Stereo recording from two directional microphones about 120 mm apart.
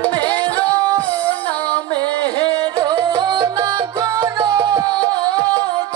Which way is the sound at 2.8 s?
35° right (ahead or behind).